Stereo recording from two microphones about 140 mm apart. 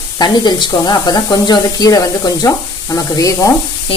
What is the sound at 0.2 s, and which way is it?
Speech, 30° left (ahead or behind).